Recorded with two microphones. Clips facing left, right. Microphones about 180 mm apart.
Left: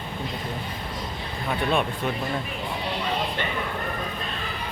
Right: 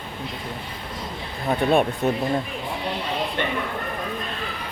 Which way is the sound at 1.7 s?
45° right (ahead or behind).